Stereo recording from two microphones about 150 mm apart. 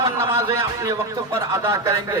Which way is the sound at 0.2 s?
20° right (ahead or behind).